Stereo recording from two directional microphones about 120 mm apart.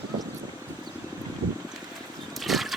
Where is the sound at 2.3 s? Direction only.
Centre (ahead or behind).